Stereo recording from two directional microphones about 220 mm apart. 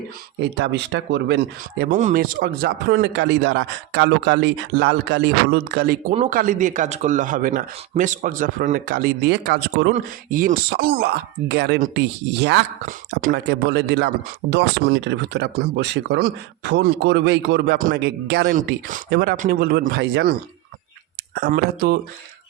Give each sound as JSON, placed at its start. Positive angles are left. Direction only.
{"t": 0.5, "sound": "speech", "side_deg": -50}
{"t": 2.0, "sound": "a man's voice", "side_deg": -35}
{"t": 21.3, "sound": "speech", "side_deg": -45}